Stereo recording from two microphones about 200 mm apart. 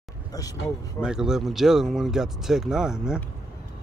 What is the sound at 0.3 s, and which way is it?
Speech, 15° left (ahead or behind).